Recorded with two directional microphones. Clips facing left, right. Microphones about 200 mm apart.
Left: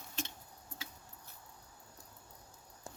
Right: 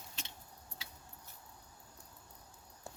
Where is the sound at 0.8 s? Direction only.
50° left (ahead or behind).